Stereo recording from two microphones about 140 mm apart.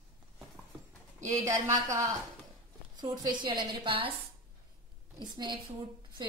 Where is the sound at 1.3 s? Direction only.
20° right (ahead or behind).